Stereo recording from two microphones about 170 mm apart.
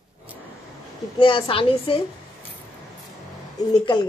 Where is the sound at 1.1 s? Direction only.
30° left (ahead or behind).